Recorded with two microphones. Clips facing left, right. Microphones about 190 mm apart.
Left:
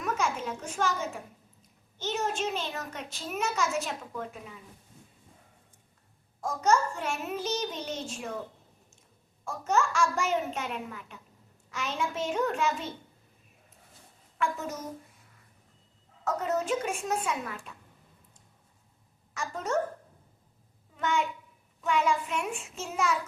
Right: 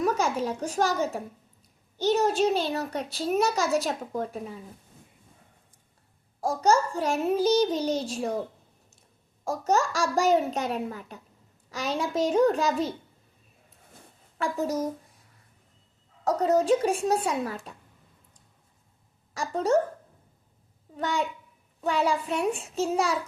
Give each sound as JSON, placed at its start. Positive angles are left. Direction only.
{"t": 0.0, "sound": "a child's voice", "side_deg": -35}
{"t": 6.4, "sound": "a child's voice", "side_deg": -35}
{"t": 14.3, "sound": "a child's voice", "side_deg": -35}
{"t": 16.2, "sound": "a child's voice", "side_deg": -35}
{"t": 19.3, "sound": "a woman's voice", "side_deg": -35}
{"t": 20.9, "sound": "a child's voice", "side_deg": -35}